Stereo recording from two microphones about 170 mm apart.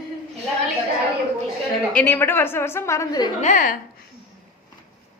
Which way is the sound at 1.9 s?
10° left (ahead or behind).